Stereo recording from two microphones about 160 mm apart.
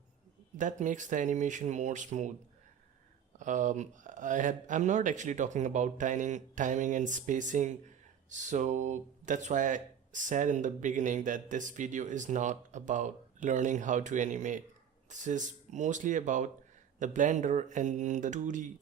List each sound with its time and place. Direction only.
0.6 s speech: 50° right (ahead or behind)
3.3 s speech: 50° right (ahead or behind)